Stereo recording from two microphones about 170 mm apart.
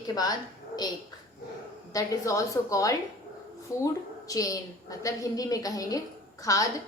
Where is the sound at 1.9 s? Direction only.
20° left (ahead or behind).